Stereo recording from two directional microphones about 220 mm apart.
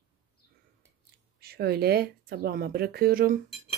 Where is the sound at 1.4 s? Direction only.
45° right (ahead or behind).